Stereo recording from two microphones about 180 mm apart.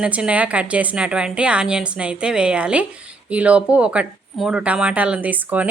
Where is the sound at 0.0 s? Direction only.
5° right (ahead or behind).